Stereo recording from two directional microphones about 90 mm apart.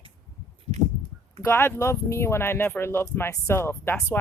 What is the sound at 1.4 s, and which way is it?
Speech, 25° left (ahead or behind).